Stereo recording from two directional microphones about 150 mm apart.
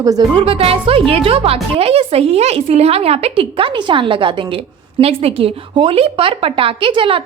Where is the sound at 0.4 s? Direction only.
40° right (ahead or behind).